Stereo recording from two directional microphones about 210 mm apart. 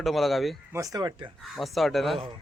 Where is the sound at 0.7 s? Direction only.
15° right (ahead or behind).